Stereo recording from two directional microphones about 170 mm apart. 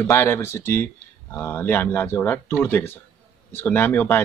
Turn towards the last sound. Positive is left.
turn(degrees=10)  # may be behind; listen again after turning